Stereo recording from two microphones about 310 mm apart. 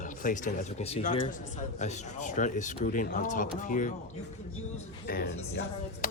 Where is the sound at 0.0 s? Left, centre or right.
Left.